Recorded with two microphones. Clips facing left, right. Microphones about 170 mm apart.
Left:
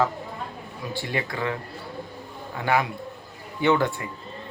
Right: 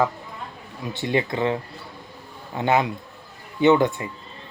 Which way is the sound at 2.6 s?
20° right (ahead or behind).